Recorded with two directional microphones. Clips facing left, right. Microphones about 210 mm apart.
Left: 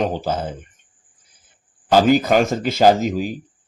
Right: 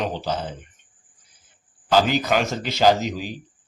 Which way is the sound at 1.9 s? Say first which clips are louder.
Left 5 dB; 45° left (ahead or behind).